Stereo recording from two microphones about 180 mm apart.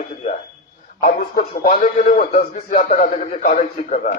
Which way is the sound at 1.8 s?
45° left (ahead or behind).